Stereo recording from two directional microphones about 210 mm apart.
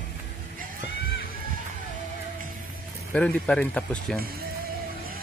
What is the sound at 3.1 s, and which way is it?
Speech, 5° left (ahead or behind).